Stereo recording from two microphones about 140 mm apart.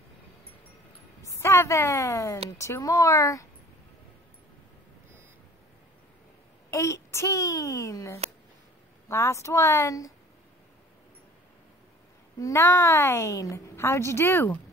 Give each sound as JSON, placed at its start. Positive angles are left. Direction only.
{"t": 1.2, "sound": "a woman's voice", "side_deg": 20}
{"t": 6.7, "sound": "a woman's voice", "side_deg": 20}
{"t": 12.4, "sound": "a woman's voice", "side_deg": 20}